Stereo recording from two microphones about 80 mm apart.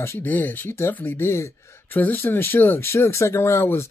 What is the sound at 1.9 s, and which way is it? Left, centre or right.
Speech, left.